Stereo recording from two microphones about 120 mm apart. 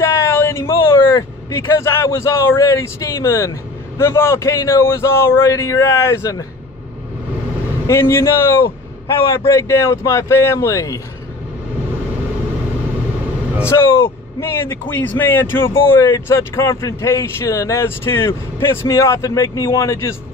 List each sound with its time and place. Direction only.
0.0 s a sound: 20° left (ahead or behind)
1.7 s speech: 20° left (ahead or behind)
7.8 s speech: 20° left (ahead or behind)
13.7 s speech: 30° left (ahead or behind)